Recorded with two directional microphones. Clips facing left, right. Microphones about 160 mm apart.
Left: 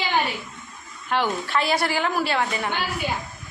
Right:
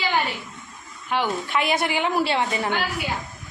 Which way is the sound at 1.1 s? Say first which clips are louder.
Even; 15° right (ahead or behind).